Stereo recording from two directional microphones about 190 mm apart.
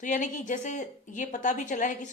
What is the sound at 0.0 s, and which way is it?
A woman's voice, 40° left (ahead or behind).